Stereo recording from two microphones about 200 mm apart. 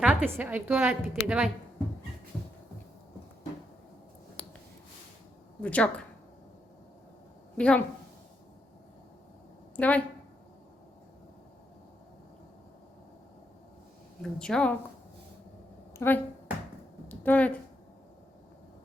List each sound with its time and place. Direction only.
0.0 s a woman's voice: 5° right (ahead or behind)
4.4 s a sound: 5° left (ahead or behind)
5.6 s speech: 5° left (ahead or behind)
7.5 s a woman's voice: 5° left (ahead or behind)
9.7 s a woman's voice: 5° left (ahead or behind)
14.2 s a woman's voice: 5° left (ahead or behind)
16.0 s speech: 10° left (ahead or behind)
17.1 s a sound: 10° left (ahead or behind)